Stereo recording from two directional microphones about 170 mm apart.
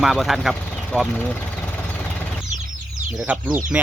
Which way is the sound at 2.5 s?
45° right (ahead or behind).